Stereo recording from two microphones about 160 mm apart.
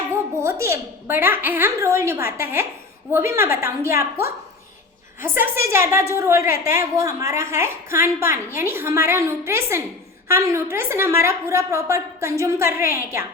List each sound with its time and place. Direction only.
0.3 s a woman's voice: 15° right (ahead or behind)
5.4 s a woman's voice: 15° right (ahead or behind)